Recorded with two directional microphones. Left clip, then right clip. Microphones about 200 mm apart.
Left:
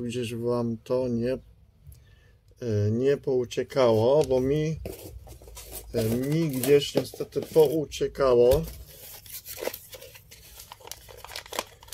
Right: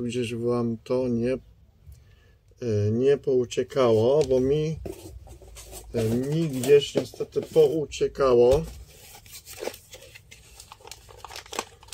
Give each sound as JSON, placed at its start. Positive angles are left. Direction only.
{"t": 0.0, "sound": "speech", "side_deg": 10}
{"t": 2.6, "sound": "speech", "side_deg": 10}
{"t": 6.3, "sound": "speech", "side_deg": 25}
{"t": 8.6, "sound": "tearing", "side_deg": 25}
{"t": 10.7, "sound": "crumpling", "side_deg": 30}